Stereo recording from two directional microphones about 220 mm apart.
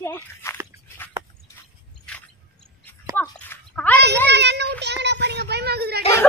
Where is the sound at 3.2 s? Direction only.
10° left (ahead or behind).